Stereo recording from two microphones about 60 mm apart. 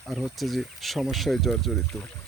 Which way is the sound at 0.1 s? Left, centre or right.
Centre.